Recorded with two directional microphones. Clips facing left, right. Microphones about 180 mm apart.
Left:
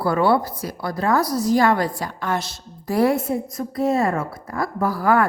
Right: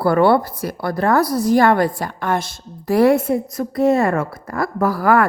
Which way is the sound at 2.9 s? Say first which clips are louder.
Right 5 dB; 75° right (ahead or behind).